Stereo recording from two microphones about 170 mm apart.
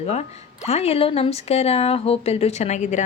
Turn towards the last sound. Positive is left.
turn(degrees=45)  # may be behind; listen again after turning